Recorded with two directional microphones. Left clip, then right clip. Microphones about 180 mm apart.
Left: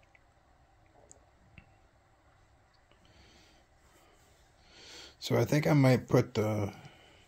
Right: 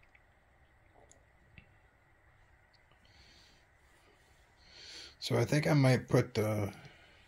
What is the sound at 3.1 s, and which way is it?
Snort, 15° left (ahead or behind).